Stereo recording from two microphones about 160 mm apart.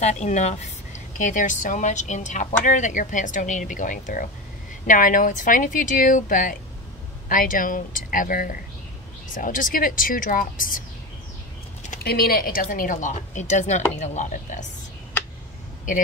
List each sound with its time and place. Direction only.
0.0 s a woman's voice: 45° left (ahead or behind)
12.0 s a woman's voice: 75° left (ahead or behind); by 14.7 s 50° left (ahead or behind)